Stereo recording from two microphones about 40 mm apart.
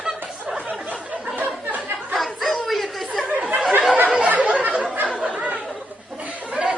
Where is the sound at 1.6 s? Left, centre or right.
Right.